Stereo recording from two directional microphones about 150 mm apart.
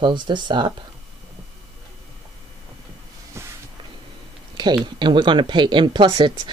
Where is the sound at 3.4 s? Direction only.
15° right (ahead or behind).